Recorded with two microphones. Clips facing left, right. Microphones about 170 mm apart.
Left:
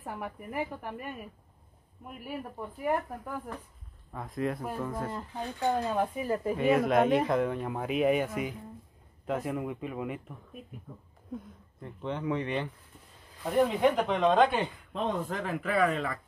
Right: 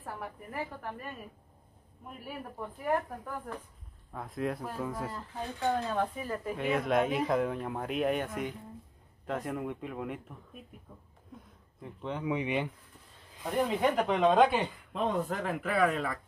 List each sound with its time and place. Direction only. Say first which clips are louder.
0.0 s speech: left 3 dB; 15° left (ahead or behind)
4.1 s speech: left 2 dB; centre (ahead or behind)
5.1 s speech: left 2 dB; 15° left (ahead or behind)
6.2 s speech: left 6 dB; 25° left (ahead or behind)
6.5 s speech: left 4 dB; 5° left (ahead or behind)
11.8 s speech: left 2 dB; centre (ahead or behind)
13.4 s speech: left 4 dB; centre (ahead or behind)